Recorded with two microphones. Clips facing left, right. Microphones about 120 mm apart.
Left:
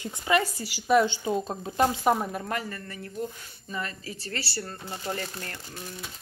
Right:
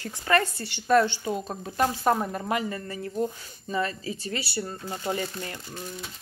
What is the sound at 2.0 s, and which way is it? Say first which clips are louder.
Speech: even; 5° left (ahead or behind).